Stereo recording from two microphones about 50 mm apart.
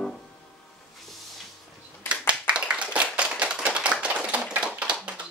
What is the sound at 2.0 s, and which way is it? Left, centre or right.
Clapping, centre.